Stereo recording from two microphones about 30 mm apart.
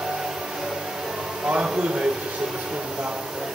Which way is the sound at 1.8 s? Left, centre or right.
Right.